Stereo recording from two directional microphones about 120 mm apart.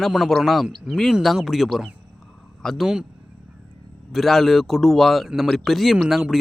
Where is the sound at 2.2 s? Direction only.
Centre (ahead or behind).